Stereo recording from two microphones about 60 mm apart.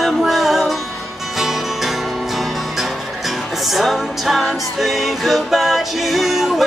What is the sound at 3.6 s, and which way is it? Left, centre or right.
Music, centre.